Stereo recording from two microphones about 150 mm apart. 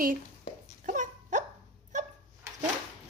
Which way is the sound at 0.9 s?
55° right (ahead or behind).